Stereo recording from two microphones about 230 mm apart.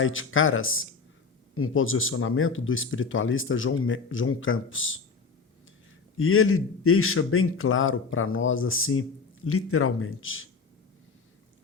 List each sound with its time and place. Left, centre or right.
0.0 s a man's voice: left
6.1 s a man's voice: left